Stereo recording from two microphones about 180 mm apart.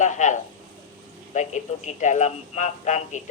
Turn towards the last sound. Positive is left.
turn(degrees=40)  # may be behind; listen again after turning